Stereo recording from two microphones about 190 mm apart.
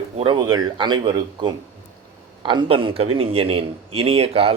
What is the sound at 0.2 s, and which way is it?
A man's voice, 25° right (ahead or behind).